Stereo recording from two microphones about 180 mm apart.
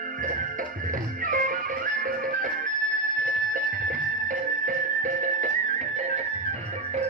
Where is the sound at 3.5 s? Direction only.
50° right (ahead or behind).